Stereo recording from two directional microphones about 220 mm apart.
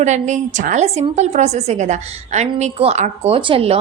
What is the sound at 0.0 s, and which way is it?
A woman's voice, 30° right (ahead or behind).